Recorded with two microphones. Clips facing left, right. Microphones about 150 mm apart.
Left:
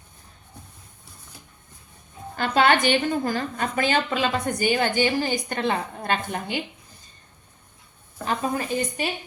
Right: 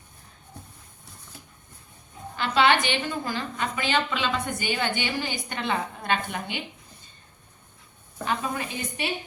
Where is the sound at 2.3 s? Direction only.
45° left (ahead or behind).